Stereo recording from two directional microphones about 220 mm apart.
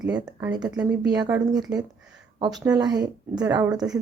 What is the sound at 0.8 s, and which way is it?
Speech, 5° right (ahead or behind).